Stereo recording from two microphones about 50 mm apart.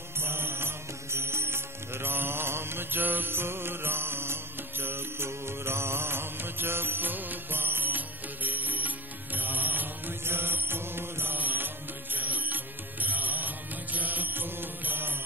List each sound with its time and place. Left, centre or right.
0.2 s music: right
11.3 s music: right
13.9 s mantra: right